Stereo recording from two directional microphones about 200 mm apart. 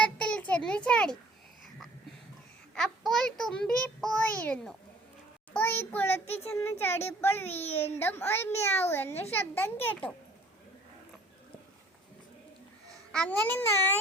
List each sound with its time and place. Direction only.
0.0 s a sound: 5° left (ahead or behind)
2.7 s a child's voice: centre (ahead or behind)
7.5 s a child's voice: 30° left (ahead or behind)
7.9 s a child's voice: 10° left (ahead or behind)
13.1 s a child's voice: 5° left (ahead or behind)